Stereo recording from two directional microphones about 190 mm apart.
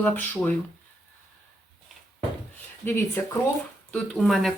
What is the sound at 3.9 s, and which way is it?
Speech, 5° left (ahead or behind).